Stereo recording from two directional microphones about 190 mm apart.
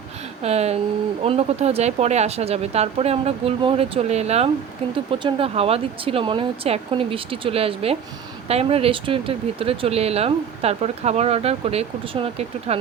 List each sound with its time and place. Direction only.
0.4 s speech: 35° right (ahead or behind)